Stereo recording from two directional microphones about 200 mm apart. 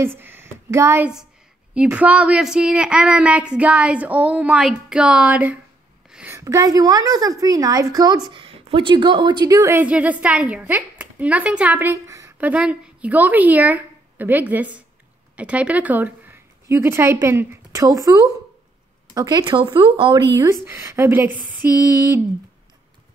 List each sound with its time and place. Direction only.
0.0 s a woman's voice: 10° right (ahead or behind)
20.6 s a woman's voice: 15° right (ahead or behind)